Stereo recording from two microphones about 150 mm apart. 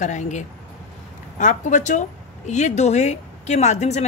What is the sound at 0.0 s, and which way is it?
A woman's voice, 55° left (ahead or behind).